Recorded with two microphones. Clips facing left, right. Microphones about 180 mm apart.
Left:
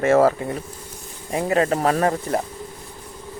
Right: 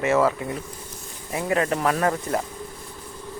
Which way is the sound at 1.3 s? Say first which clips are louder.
Left 3 dB; 30° left (ahead or behind).